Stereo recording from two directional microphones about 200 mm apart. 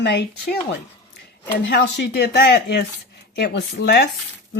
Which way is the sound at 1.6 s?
60° left (ahead or behind).